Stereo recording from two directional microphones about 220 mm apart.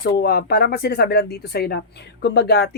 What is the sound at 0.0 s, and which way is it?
A woman's voice, 45° left (ahead or behind).